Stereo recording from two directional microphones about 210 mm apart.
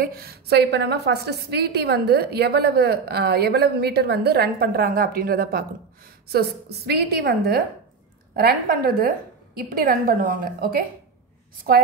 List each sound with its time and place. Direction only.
0.0 s a woman's voice: 45° right (ahead or behind)